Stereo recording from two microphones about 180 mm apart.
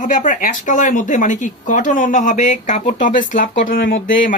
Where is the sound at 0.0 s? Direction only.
45° left (ahead or behind).